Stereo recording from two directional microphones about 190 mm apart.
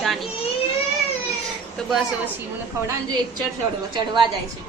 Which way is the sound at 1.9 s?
Centre (ahead or behind).